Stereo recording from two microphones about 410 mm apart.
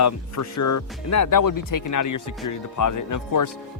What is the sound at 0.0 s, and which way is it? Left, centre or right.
Speech, left.